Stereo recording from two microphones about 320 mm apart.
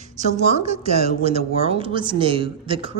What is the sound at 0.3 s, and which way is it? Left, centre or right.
A woman's voice, right.